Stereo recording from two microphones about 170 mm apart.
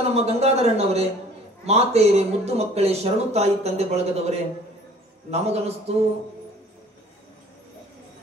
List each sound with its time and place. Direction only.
0.0 s speech: 35° right (ahead or behind)